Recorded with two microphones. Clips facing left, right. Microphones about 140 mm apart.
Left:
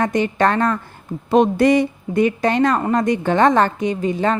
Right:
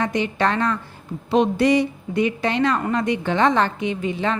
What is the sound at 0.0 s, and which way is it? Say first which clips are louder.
A woman's voice: left 4 dB; 45° left (ahead or behind).